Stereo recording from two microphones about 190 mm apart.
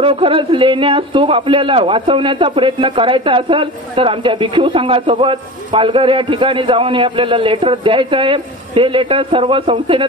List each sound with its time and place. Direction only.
0.0 s a man's voice: 30° right (ahead or behind)